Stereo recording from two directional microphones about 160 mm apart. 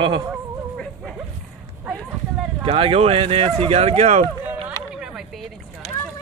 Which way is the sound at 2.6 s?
35° right (ahead or behind).